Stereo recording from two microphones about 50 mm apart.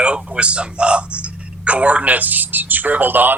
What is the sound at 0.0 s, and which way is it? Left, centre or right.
Speech, right.